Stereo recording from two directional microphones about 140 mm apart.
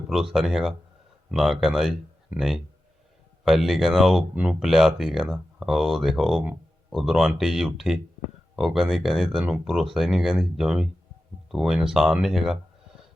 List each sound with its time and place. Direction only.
0.1 s speech: centre (ahead or behind)